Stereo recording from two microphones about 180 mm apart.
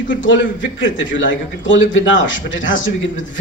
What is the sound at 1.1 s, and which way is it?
Speech, 90° left.